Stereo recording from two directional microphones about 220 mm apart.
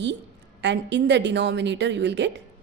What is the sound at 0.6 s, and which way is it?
A woman's voice, 50° right (ahead or behind).